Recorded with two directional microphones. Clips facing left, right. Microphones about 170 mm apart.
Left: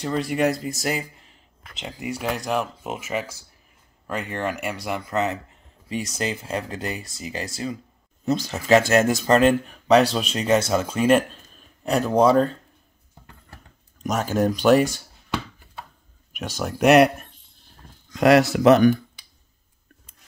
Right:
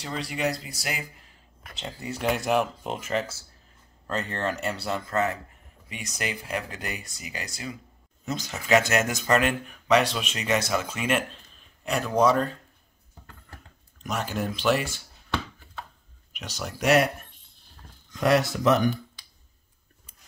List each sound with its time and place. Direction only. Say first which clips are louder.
0.0 s speech: left 7 dB; 50° left (ahead or behind)
1.8 s speech: left 4 dB; 15° left (ahead or behind)
2.2 s speech: right 2 dB; centre (ahead or behind); by 5.6 s 20° left (ahead or behind)
5.9 s speech: left 7 dB; 30° left (ahead or behind)
14.0 s speech: left 8 dB; 45° left (ahead or behind)
16.3 s speech: left 8 dB; 50° left (ahead or behind)
18.1 s speech: left 6 dB; 80° left